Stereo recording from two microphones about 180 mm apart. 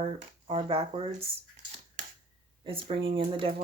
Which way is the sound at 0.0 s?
30° right (ahead or behind).